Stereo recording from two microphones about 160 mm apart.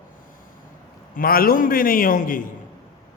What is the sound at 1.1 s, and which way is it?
A man's voice, 65° left (ahead or behind).